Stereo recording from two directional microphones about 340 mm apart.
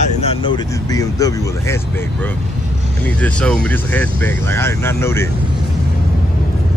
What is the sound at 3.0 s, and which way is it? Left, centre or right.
Speech, centre.